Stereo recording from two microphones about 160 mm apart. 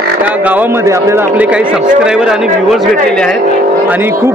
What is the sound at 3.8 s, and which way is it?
Speech, 10° right (ahead or behind).